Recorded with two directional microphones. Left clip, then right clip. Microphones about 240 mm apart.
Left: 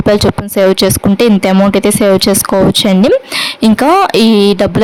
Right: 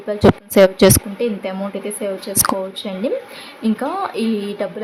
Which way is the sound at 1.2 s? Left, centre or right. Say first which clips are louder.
Left 13 dB; left.